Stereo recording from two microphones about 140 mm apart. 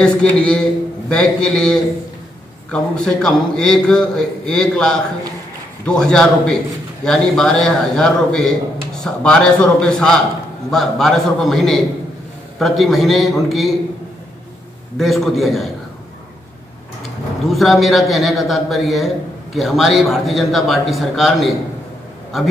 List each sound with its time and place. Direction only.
0.0 s a man's voice: 5° left (ahead or behind)
15.0 s a man's voice: centre (ahead or behind)
17.5 s a man's voice: centre (ahead or behind)